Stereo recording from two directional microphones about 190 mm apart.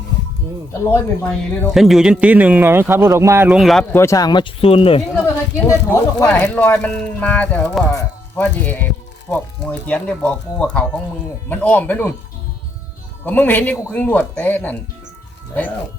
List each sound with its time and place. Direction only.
0.7 s speech: 10° left (ahead or behind)
1.7 s a man's voice: centre (ahead or behind)
3.9 s speech: 15° left (ahead or behind)
5.1 s speech: 10° left (ahead or behind)
11.4 s speech: 10° left (ahead or behind)
13.2 s speech: 10° left (ahead or behind)